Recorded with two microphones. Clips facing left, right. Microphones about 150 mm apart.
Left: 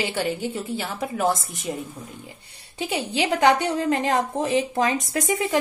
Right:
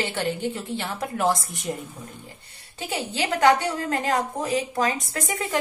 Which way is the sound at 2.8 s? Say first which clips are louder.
Left 3 dB; 15° left (ahead or behind).